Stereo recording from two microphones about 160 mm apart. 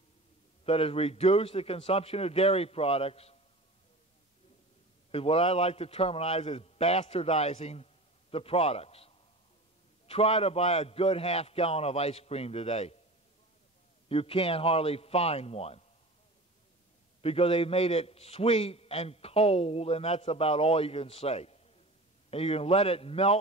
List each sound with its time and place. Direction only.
0.7 s a man's voice: 35° left (ahead or behind)
5.1 s a man's voice: 35° left (ahead or behind)
14.0 s a man's voice: 35° left (ahead or behind)
17.2 s a man's voice: 35° left (ahead or behind)